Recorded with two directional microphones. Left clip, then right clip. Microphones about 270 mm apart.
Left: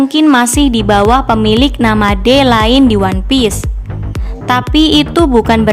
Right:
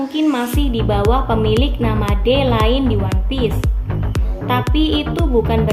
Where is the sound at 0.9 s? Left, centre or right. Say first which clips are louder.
Left 8 dB; left.